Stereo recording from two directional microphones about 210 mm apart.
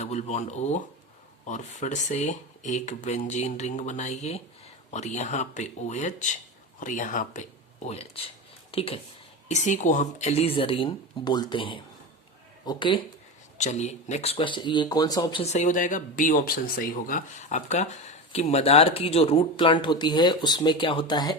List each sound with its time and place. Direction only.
0.0 s speech: 30° left (ahead or behind)
13.6 s speech: 35° left (ahead or behind)